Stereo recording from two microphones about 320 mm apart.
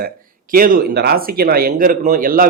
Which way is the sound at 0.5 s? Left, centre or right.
Right.